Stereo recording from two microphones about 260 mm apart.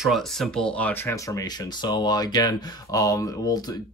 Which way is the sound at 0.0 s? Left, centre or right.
Centre.